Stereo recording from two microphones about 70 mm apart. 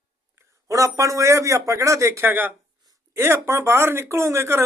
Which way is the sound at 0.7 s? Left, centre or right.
Right.